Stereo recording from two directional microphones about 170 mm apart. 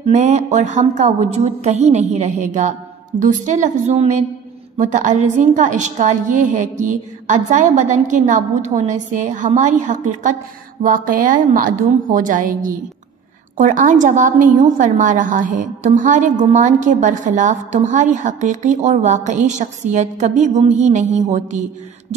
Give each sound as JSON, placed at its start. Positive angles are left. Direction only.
{"t": 0.0, "sound": "a woman's voice", "side_deg": -40}